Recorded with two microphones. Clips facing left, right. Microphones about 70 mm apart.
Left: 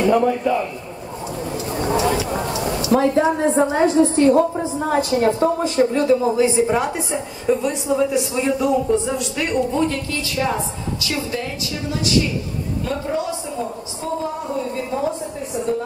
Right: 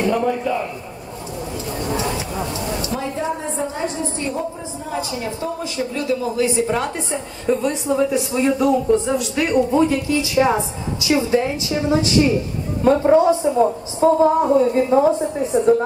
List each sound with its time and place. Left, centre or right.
0.0 s a man's voice: centre
1.8 s a sound: left
2.9 s a woman's voice: left; by 7.2 s centre
7.4 s a man's voice: centre; by 15.0 s right